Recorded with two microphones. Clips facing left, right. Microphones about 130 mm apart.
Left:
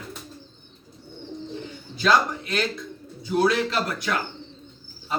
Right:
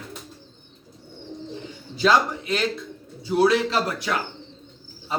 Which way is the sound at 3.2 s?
30° right (ahead or behind).